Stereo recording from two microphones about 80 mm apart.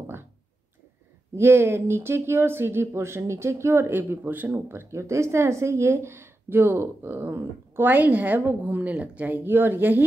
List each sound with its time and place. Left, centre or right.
1.3 s speech: right